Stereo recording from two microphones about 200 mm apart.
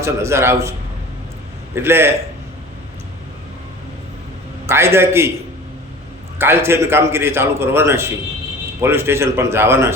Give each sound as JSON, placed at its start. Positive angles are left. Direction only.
{"t": 0.0, "sound": "a man's voice", "side_deg": -15}
{"t": 1.7, "sound": "a man's voice", "side_deg": -10}
{"t": 4.6, "sound": "a man's voice", "side_deg": -10}
{"t": 6.4, "sound": "a man's voice", "side_deg": -10}